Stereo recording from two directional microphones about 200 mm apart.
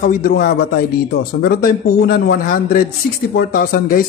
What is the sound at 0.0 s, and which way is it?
Speech, 45° left (ahead or behind).